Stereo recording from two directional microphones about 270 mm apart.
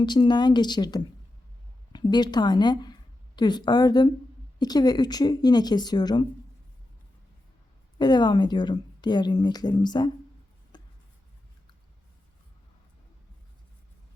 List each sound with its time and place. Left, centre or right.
0.0 s a woman's voice: centre
7.9 s a woman's voice: centre
10.7 s writing: centre